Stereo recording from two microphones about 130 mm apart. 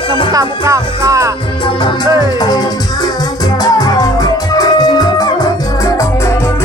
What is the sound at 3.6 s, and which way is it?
Music, 30° left (ahead or behind).